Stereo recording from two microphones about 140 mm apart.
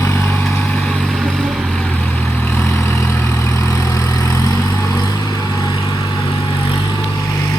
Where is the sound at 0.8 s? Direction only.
Centre (ahead or behind); by 4.0 s 20° left (ahead or behind).